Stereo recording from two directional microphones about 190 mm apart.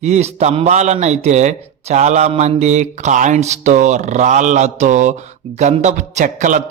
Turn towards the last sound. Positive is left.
turn(degrees=-40)  # may be behind; listen again after turning